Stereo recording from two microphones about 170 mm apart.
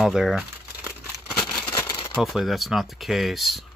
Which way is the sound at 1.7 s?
25° left (ahead or behind).